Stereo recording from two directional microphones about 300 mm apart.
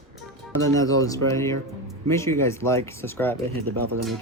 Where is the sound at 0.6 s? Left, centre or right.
Centre.